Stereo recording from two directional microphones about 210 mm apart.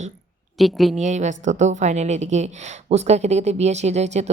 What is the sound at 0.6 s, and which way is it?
Speech, centre (ahead or behind).